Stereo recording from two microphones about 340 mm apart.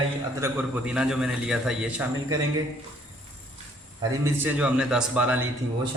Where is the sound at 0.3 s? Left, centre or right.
Centre.